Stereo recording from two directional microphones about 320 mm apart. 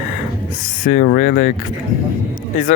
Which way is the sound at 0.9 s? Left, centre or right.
Left.